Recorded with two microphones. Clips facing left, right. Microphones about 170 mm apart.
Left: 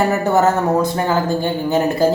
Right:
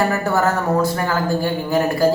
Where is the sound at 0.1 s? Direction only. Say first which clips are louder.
Left 4 dB; 20° left (ahead or behind).